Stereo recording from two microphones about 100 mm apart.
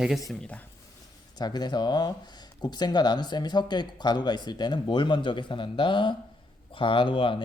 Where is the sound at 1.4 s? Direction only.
45° left (ahead or behind).